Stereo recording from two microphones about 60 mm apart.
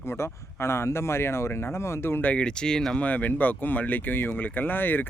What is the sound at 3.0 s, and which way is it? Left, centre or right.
Speech, left.